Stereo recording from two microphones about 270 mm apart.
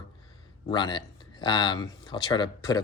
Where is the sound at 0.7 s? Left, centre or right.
Centre.